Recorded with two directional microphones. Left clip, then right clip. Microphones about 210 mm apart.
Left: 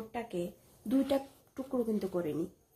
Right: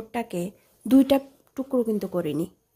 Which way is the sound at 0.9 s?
45° right (ahead or behind).